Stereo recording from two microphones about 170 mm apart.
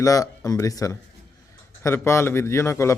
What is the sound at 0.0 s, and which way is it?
A man's voice, 20° left (ahead or behind).